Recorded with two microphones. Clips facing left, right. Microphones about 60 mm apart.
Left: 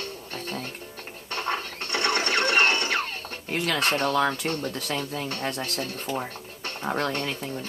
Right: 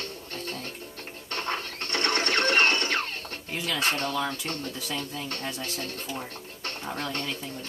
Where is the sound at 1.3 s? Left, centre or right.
Centre.